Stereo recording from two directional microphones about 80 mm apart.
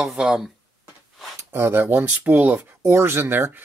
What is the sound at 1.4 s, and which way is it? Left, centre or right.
Speech, right.